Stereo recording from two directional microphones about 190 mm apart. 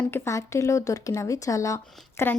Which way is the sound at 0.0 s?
15° left (ahead or behind).